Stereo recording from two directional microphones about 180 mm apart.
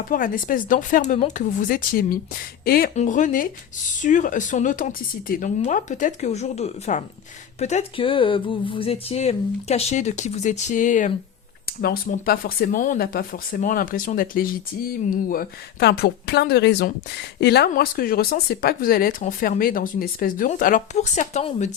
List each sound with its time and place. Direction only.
0.1 s speech: 50° left (ahead or behind)
2.9 s speech: 40° left (ahead or behind)
11.6 s speech: 60° left (ahead or behind); by 21.7 s 40° left (ahead or behind)